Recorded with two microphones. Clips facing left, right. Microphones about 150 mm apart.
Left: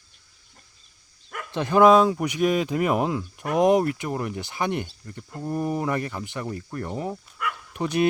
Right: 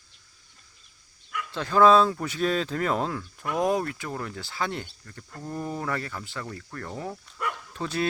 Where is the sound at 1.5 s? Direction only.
20° left (ahead or behind).